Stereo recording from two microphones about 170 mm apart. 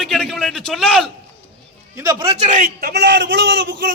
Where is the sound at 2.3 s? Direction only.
40° right (ahead or behind); by 3.9 s 90° right.